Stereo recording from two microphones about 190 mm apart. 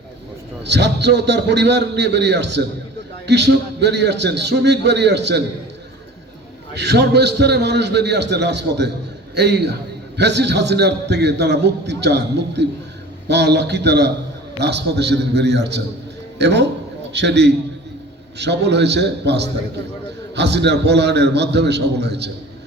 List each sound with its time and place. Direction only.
0.6 s a man's voice: 65° right (ahead or behind)
6.7 s a man's voice: 60° right (ahead or behind)